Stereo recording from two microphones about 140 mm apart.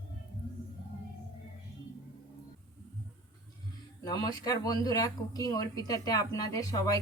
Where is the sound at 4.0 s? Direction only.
30° left (ahead or behind).